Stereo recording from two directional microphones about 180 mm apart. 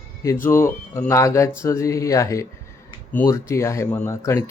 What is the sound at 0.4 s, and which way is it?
Speech, 15° left (ahead or behind).